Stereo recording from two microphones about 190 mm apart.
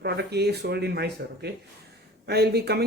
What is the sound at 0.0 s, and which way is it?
Speech, 60° right (ahead or behind).